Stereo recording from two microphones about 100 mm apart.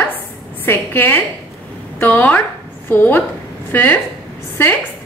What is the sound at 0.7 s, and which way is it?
A woman's voice, 20° left (ahead or behind).